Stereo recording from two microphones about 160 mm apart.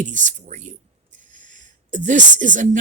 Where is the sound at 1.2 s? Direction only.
55° right (ahead or behind).